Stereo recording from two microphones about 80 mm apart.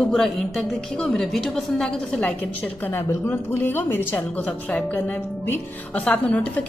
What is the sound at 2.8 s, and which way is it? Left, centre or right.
A woman's voice, left.